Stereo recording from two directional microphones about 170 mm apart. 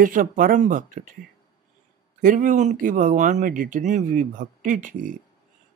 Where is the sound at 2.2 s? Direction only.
50° right (ahead or behind).